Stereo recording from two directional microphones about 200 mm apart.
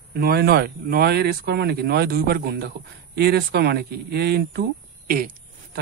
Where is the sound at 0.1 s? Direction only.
50° right (ahead or behind).